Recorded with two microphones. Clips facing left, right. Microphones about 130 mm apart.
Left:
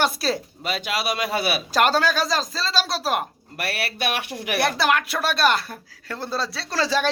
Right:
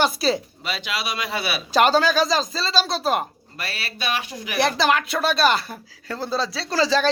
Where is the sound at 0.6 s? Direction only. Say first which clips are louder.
Left 2 dB; 45° left (ahead or behind).